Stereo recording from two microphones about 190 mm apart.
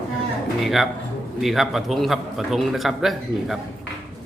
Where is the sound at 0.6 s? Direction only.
Centre (ahead or behind).